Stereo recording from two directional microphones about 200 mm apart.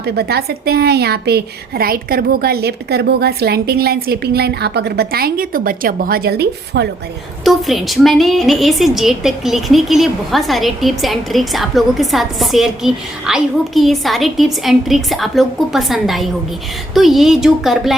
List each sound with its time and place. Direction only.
0.0 s a woman's voice: 55° right (ahead or behind)
7.4 s a woman's voice: centre (ahead or behind)